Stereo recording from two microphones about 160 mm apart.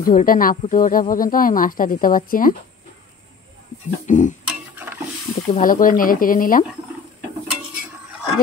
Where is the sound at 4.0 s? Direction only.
50° left (ahead or behind).